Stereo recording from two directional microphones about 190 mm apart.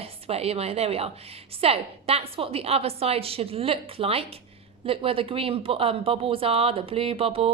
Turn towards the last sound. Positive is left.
turn(degrees=-30)  # may be behind; listen again after turning